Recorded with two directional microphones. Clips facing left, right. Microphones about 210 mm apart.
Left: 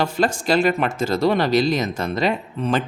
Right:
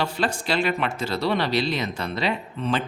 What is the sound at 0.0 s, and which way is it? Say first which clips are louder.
Speech: left 5 dB; 45° left (ahead or behind).